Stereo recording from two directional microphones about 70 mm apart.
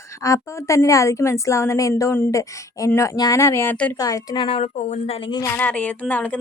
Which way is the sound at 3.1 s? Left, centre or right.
Left.